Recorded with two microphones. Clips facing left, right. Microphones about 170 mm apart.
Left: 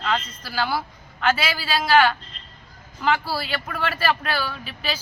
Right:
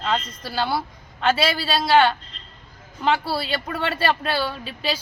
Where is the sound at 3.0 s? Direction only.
25° right (ahead or behind).